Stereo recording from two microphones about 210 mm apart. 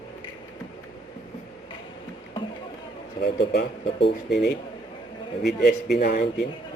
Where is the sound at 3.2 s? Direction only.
50° left (ahead or behind).